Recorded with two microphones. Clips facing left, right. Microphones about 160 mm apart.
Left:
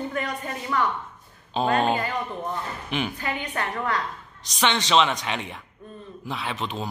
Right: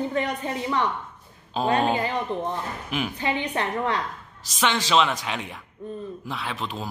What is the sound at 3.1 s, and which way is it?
Speech, 20° right (ahead or behind).